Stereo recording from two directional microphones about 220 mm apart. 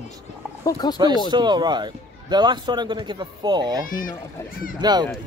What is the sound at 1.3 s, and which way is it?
A man's voice, 20° right (ahead or behind).